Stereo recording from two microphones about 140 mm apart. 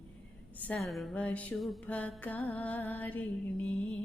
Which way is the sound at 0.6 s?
Centre (ahead or behind).